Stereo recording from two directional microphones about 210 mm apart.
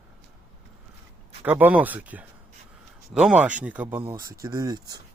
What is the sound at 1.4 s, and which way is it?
Speech, 10° right (ahead or behind).